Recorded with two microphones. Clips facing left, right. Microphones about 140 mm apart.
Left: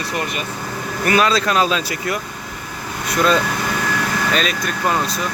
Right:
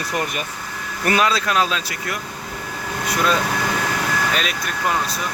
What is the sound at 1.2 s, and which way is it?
Speech, 10° right (ahead or behind).